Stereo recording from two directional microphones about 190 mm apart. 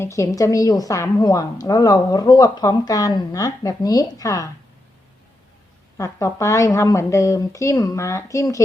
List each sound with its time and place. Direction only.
0.0 s a woman's voice: 15° left (ahead or behind)
6.0 s a woman's voice: 15° left (ahead or behind)